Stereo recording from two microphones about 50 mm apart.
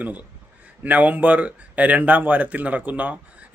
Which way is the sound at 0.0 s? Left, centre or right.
Right.